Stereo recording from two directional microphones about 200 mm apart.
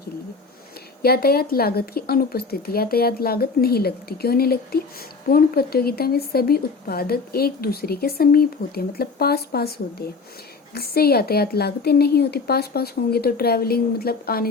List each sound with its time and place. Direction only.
1.0 s speech: 50° left (ahead or behind)